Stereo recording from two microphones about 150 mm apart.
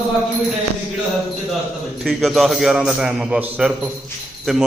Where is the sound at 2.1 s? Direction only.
Centre (ahead or behind).